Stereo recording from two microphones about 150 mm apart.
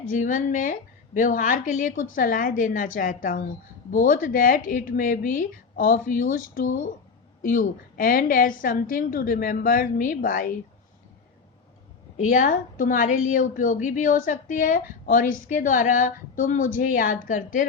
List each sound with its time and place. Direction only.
0.0 s a woman's voice: 65° left (ahead or behind)
12.1 s a woman's voice: 60° left (ahead or behind)